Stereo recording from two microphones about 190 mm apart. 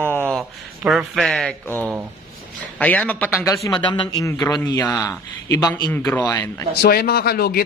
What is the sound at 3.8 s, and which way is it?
A man's voice, 25° left (ahead or behind).